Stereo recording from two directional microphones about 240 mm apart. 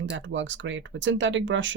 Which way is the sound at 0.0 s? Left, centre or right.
Right.